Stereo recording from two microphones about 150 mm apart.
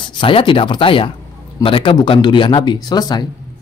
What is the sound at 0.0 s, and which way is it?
Speech, 30° left (ahead or behind).